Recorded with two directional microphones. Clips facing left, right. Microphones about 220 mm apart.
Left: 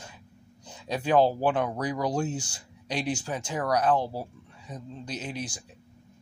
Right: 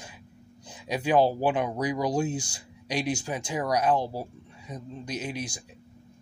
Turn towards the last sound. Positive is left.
turn(degrees=-10)  # may be behind; listen again after turning